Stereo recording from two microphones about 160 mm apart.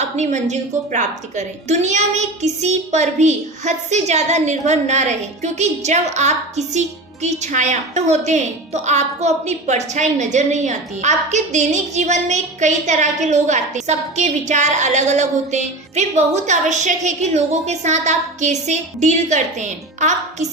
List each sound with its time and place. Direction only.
0.0 s a woman's voice: 45° right (ahead or behind)